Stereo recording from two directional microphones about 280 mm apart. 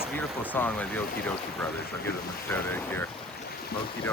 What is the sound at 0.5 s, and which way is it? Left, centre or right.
Speech, centre.